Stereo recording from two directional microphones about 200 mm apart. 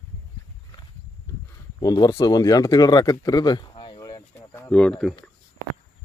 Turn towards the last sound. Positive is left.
turn(degrees=5)  # may be behind; listen again after turning